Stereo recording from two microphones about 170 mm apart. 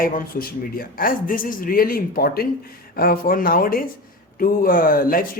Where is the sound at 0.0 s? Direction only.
55° left (ahead or behind).